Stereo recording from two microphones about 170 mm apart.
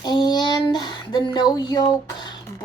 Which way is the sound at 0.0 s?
25° left (ahead or behind).